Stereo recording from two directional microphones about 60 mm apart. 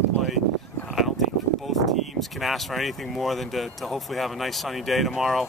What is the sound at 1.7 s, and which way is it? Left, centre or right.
Speech, centre.